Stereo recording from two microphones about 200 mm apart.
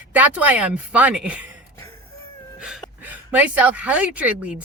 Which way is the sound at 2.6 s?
5° right (ahead or behind).